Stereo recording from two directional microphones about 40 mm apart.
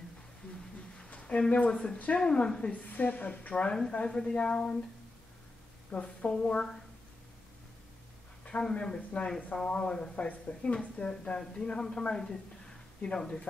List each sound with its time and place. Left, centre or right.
1.1 s a sound: left
1.5 s speech: left
2.7 s a woman's voice: left
3.9 s speech: left
5.9 s a woman's voice: left
8.5 s speech: left
12.1 s speech: centre